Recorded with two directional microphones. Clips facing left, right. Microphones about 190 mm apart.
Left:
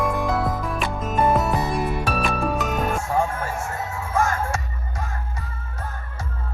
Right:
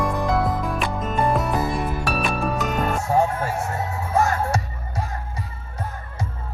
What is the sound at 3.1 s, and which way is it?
Music, 35° right (ahead or behind).